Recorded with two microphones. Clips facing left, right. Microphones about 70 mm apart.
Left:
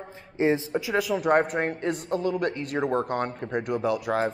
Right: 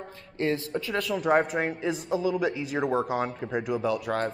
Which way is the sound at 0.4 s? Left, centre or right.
Centre.